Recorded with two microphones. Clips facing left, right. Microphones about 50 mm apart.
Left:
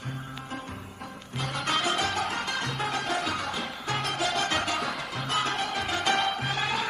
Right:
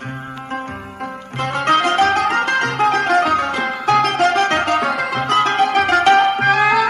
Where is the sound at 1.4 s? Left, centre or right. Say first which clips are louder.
Right 13 dB; right.